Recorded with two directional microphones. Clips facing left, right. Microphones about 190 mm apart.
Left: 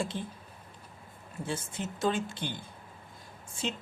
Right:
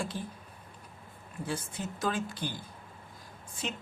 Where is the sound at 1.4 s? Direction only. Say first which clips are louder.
Even; 25° left (ahead or behind).